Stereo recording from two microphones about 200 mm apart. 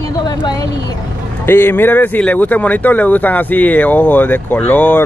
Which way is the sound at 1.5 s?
10° left (ahead or behind).